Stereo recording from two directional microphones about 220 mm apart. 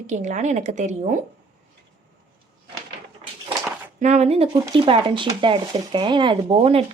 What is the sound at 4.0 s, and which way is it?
Speech, 30° right (ahead or behind).